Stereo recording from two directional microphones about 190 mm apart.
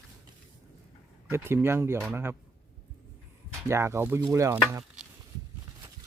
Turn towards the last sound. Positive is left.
turn(degrees=-15)  # may be behind; listen again after turning